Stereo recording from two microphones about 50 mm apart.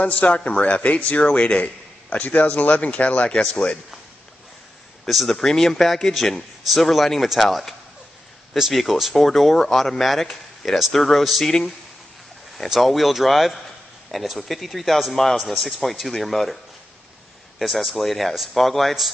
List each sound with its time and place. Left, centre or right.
0.0 s speech: left
5.0 s a man's voice: centre
12.6 s speech: centre
17.6 s speech: centre